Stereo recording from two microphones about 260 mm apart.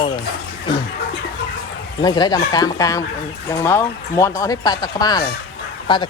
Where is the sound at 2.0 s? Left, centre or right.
Centre.